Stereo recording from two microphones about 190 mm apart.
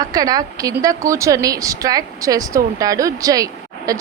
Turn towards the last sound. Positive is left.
turn(degrees=-20)  # may be behind; listen again after turning